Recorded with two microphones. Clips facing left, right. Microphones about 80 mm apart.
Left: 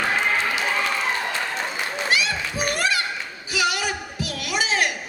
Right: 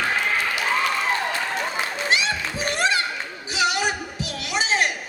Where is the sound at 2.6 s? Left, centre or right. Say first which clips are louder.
Right 2 dB; right.